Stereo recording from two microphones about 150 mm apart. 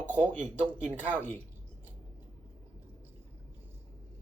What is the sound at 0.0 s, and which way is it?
Speech, 15° left (ahead or behind).